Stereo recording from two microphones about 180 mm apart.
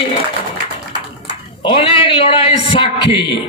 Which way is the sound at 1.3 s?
30° left (ahead or behind).